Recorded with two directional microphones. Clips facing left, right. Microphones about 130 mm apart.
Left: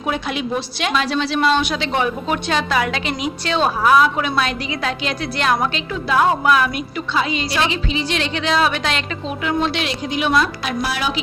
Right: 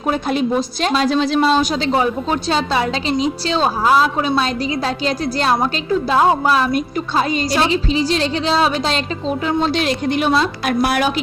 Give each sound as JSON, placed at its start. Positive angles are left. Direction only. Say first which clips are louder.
{"t": 0.1, "sound": "a woman's voice", "louder": "right 5 dB", "side_deg": -40}
{"t": 10.2, "sound": "a woman's voice", "louder": "even", "side_deg": -30}
{"t": 10.7, "sound": "a woman's voice", "louder": "right 6 dB", "side_deg": -55}